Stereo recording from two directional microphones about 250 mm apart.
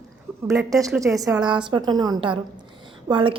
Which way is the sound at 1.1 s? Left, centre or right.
Centre.